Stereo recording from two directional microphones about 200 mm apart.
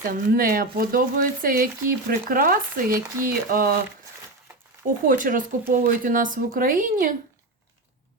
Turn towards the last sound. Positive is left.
turn(degrees=-45)  # may be behind; listen again after turning